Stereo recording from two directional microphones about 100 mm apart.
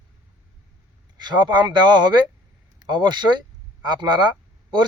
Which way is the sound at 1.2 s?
45° right (ahead or behind).